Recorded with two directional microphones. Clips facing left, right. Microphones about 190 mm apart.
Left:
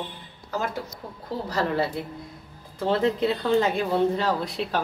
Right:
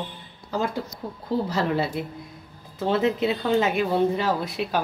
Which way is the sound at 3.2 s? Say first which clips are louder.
Even; 20° right (ahead or behind).